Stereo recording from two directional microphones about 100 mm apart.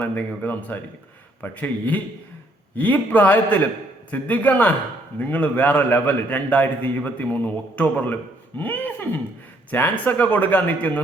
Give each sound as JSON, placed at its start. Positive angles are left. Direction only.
{"t": 0.0, "sound": "a man's voice", "side_deg": 15}